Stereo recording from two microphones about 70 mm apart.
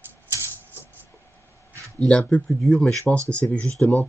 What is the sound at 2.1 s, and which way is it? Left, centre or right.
Speech, centre.